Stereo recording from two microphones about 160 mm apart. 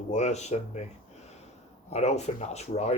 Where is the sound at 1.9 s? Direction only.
45° left (ahead or behind).